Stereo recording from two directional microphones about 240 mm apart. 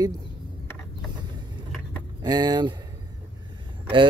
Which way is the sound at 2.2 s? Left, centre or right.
Centre.